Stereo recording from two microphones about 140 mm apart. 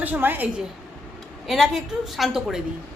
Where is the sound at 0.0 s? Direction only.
15° right (ahead or behind).